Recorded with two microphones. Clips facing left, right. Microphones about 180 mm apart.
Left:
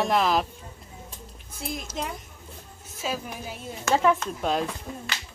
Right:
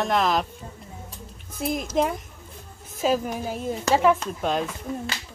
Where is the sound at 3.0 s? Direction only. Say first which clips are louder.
Right 8 dB; 45° right (ahead or behind).